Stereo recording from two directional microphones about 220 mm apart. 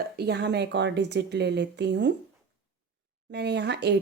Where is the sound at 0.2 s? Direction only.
50° right (ahead or behind).